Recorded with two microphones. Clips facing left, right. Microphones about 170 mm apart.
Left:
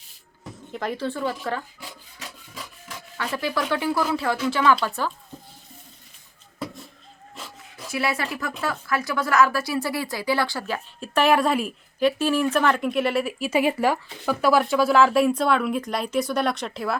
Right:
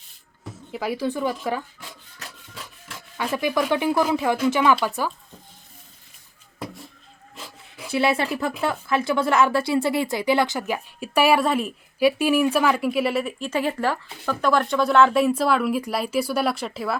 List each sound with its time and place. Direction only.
0.7 s speech: 10° right (ahead or behind)
3.3 s speech: 15° right (ahead or behind)
7.9 s speech: 25° right (ahead or behind); by 17.0 s centre (ahead or behind)